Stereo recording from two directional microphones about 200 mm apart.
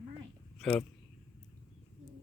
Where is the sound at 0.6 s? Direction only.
5° left (ahead or behind).